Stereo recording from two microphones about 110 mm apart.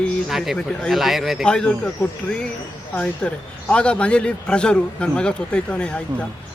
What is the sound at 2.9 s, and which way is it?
A man's voice, 10° left (ahead or behind).